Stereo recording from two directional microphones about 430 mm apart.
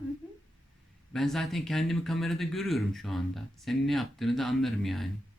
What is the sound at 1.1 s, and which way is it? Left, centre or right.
Speech, centre.